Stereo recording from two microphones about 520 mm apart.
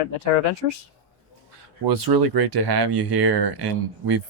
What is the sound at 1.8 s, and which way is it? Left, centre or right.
Speech, right.